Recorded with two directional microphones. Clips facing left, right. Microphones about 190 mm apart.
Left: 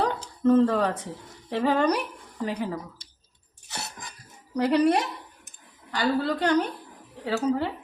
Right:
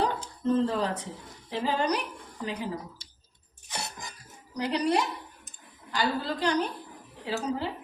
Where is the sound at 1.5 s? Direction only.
60° left (ahead or behind).